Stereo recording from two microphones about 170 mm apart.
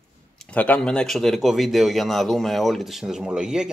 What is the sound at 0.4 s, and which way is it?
Speech, 10° left (ahead or behind).